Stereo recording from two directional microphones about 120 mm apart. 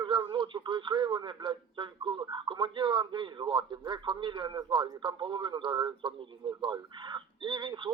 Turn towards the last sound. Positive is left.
turn(degrees=-40)  # may be behind; listen again after turning